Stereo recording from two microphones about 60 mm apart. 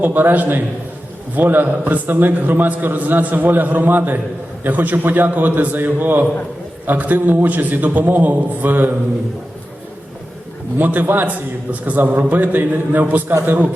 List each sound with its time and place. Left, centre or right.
0.0 s a man's voice: right
10.8 s a man's voice: right